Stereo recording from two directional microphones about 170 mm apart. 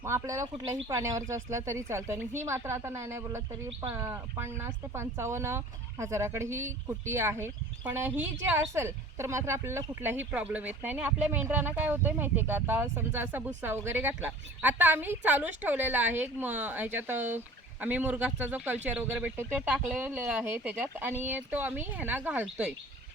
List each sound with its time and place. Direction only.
0.0 s speech: 15° right (ahead or behind)